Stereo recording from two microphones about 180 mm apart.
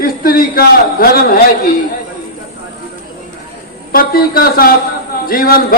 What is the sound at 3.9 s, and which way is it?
A man's voice, 55° left (ahead or behind).